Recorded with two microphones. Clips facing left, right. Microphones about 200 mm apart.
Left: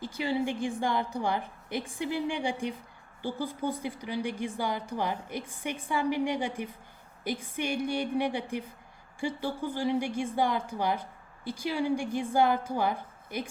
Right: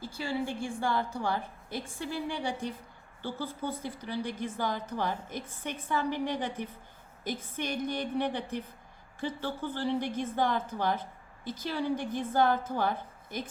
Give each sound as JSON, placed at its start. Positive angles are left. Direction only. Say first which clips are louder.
{"t": 0.0, "sound": "a woman's voice", "louder": "left 4 dB", "side_deg": 20}